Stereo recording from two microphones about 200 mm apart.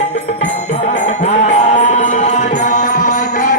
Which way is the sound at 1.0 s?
35° left (ahead or behind).